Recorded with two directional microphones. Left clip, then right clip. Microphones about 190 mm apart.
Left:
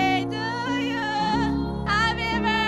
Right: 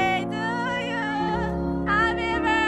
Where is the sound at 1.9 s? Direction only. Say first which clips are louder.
Even; 10° left (ahead or behind).